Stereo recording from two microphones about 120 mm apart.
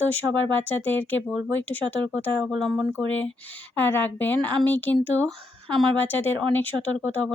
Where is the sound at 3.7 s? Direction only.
15° left (ahead or behind).